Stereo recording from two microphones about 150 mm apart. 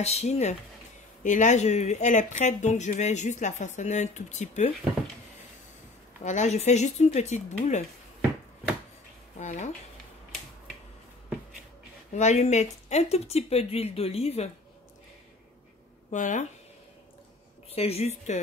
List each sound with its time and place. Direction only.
0.0 s speech: 45° left (ahead or behind)
6.2 s speech: 50° left (ahead or behind)
9.4 s speech: 50° left (ahead or behind)
12.1 s speech: 50° left (ahead or behind)
16.1 s speech: 55° left (ahead or behind)
17.6 s speech: 40° left (ahead or behind)